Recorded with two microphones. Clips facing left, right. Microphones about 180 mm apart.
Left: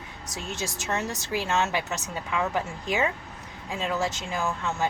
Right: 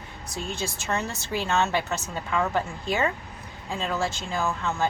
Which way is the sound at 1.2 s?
10° left (ahead or behind).